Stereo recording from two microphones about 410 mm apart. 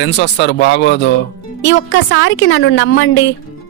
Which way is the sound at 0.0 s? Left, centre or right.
Left.